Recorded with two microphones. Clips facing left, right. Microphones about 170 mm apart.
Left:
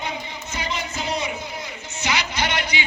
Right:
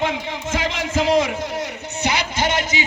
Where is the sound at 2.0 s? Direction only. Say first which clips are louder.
Right 3 dB; 50° right (ahead or behind).